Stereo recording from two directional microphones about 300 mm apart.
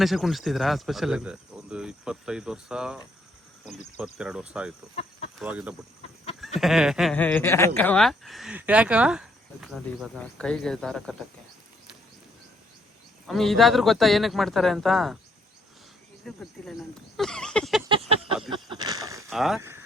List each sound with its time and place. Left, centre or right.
0.0 s speech: centre
13.2 s speech: centre
16.2 s speech: centre
17.8 s a sound: centre
19.3 s speech: centre